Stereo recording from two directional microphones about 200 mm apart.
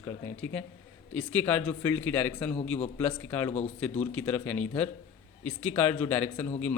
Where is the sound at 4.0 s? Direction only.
5° left (ahead or behind).